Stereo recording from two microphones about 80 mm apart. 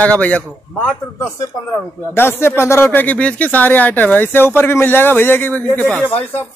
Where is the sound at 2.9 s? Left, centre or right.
Centre.